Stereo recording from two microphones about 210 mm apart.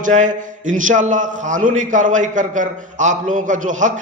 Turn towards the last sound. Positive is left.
turn(degrees=-35)  # may be behind; listen again after turning